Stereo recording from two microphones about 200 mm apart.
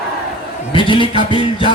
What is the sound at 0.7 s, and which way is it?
Speech, 25° left (ahead or behind).